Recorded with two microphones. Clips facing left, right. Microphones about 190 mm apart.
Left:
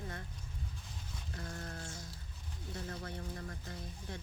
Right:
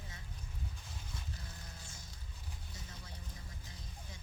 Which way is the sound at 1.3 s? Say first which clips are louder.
Left 9 dB; 60° left (ahead or behind).